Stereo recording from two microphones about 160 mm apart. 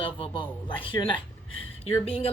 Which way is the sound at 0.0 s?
35° left (ahead or behind).